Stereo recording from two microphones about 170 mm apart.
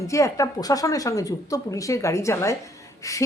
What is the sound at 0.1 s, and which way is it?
A woman's voice, 20° left (ahead or behind).